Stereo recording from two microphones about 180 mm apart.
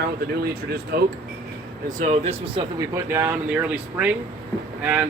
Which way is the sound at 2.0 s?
35° right (ahead or behind).